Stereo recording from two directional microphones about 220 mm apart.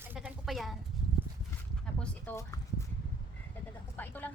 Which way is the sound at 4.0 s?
10° left (ahead or behind).